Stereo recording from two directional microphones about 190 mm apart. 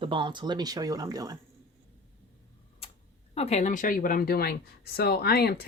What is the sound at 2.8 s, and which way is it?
Tick-tock, 30° left (ahead or behind).